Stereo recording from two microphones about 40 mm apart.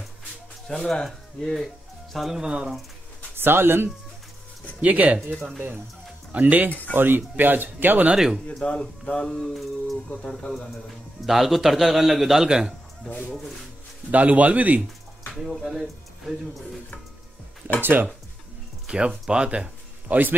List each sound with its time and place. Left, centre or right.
0.7 s speech: centre
1.0 s a man's voice: centre
2.4 s speech: centre
3.3 s speech: right
4.8 s a man's voice: right
8.6 s mantra: left
9.5 s a man's voice: centre
11.2 s a man's voice: centre
12.4 s speech: centre
13.0 s speech: centre
14.1 s a man's voice: right
15.3 s speech: centre
18.9 s speech: right
20.1 s speech: right